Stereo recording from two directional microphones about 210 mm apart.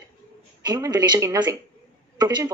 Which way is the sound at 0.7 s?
20° right (ahead or behind).